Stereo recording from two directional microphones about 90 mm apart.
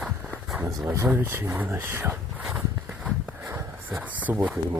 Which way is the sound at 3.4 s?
20° right (ahead or behind).